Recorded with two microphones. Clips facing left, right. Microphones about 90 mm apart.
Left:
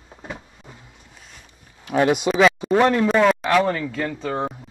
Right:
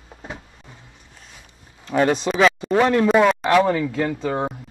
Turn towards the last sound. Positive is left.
turn(degrees=-10)  # may be behind; listen again after turning